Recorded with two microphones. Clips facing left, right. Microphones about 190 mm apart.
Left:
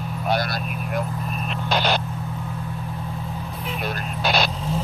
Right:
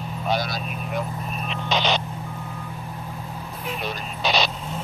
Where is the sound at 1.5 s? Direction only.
10° left (ahead or behind).